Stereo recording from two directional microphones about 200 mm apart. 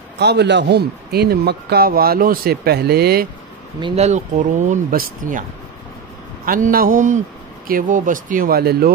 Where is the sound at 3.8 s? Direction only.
30° right (ahead or behind).